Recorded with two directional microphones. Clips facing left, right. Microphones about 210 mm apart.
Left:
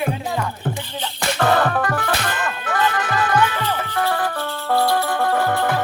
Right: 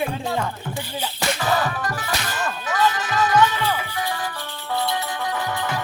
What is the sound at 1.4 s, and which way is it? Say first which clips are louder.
Music: left 7 dB; 60° left (ahead or behind).